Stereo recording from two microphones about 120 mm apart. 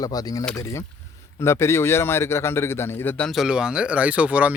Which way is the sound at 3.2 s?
Centre (ahead or behind).